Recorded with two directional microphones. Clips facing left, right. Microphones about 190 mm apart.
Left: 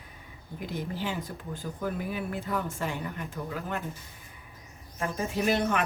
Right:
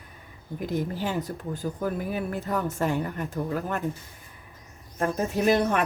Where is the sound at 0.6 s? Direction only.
45° right (ahead or behind).